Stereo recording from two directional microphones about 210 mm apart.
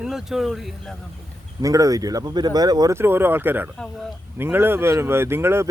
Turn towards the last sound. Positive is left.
turn(degrees=-10)  # may be behind; listen again after turning